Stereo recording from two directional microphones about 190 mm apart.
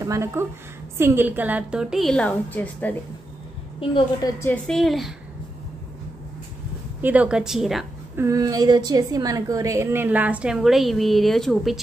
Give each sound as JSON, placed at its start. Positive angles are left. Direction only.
{"t": 0.0, "sound": "a woman's voice", "side_deg": -15}
{"t": 3.9, "sound": "a woman's voice", "side_deg": 20}
{"t": 4.5, "sound": "a woman's voice", "side_deg": 0}
{"t": 7.0, "sound": "a woman's voice", "side_deg": -10}
{"t": 8.2, "sound": "a woman's voice", "side_deg": -15}